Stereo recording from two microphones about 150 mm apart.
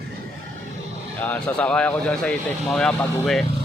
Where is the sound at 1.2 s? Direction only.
10° left (ahead or behind).